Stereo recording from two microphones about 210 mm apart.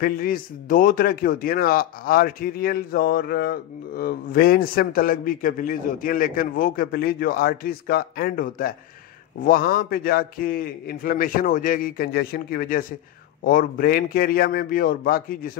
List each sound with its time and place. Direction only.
0.0 s a man's voice: 45° left (ahead or behind)